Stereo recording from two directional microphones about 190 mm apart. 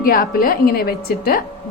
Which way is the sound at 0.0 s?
50° left (ahead or behind).